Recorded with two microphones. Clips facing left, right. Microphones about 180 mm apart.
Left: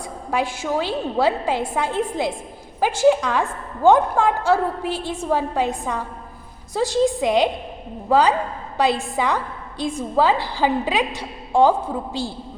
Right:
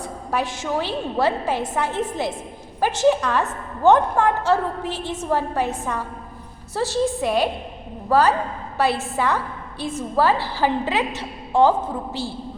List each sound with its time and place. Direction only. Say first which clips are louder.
0.0 s a woman's voice: left 1 dB; 10° left (ahead or behind)